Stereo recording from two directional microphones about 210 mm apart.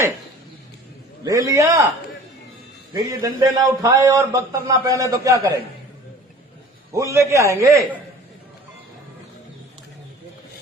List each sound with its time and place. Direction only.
1.2 s a man's voice: 15° right (ahead or behind)
2.9 s a man's voice: 15° right (ahead or behind)
6.9 s a man's voice: 15° right (ahead or behind)